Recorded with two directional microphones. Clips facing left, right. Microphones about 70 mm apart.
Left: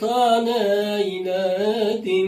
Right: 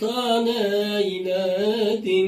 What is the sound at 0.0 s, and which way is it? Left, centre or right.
Mantra, left.